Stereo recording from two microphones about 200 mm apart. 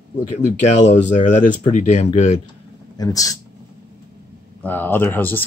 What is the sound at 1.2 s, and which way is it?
Speech, 40° left (ahead or behind).